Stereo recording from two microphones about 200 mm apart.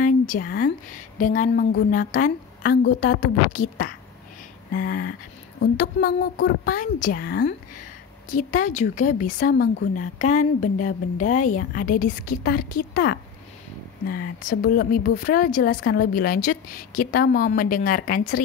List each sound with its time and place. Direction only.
0.0 s speech: 45° left (ahead or behind)
1.9 s speech: 40° left (ahead or behind)